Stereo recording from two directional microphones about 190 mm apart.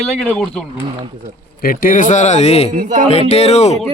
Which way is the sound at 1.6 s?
50° left (ahead or behind).